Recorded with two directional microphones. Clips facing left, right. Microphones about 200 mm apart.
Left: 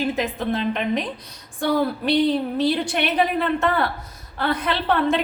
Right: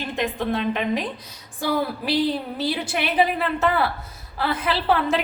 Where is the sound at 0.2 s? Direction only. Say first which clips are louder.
Even; centre (ahead or behind).